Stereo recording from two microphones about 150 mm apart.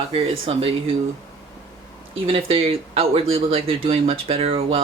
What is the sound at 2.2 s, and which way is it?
Speech, 35° right (ahead or behind).